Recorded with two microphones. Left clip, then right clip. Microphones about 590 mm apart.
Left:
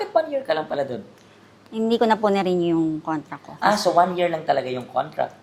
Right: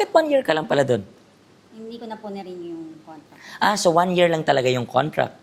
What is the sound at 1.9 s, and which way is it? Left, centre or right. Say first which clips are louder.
Speech: left 16 dB; left.